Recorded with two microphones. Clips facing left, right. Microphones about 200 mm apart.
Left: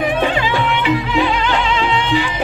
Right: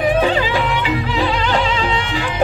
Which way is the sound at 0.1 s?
40° right (ahead or behind).